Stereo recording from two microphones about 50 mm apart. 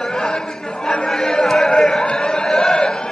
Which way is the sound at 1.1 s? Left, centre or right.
Centre.